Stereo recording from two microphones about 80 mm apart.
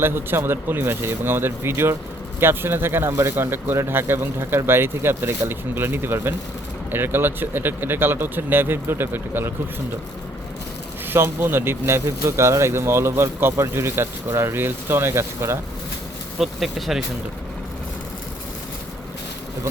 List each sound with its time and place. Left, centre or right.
0.0 s speech: right
11.1 s speech: right
16.4 s speech: centre